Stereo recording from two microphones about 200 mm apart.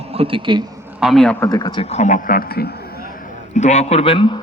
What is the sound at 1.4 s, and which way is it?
A man's voice, 20° left (ahead or behind).